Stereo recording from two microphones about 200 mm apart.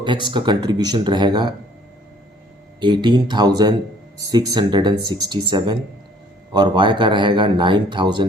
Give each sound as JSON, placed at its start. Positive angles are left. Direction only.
{"t": 0.0, "sound": "speech", "side_deg": -25}
{"t": 2.8, "sound": "speech", "side_deg": -25}